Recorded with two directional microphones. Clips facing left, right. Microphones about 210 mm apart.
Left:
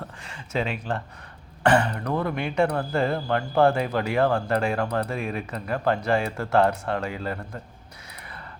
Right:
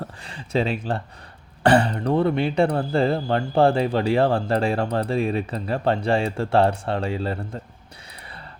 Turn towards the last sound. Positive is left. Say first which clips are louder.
# right 3 dB
turn(degrees=-30)  # may be behind; listen again after turning